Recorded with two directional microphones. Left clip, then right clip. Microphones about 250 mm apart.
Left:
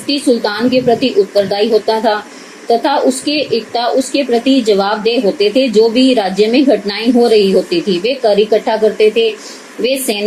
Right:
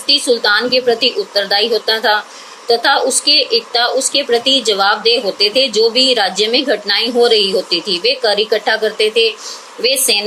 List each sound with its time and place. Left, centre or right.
0.1 s a woman's voice: right